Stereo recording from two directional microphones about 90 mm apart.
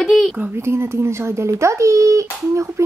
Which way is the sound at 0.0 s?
5° left (ahead or behind).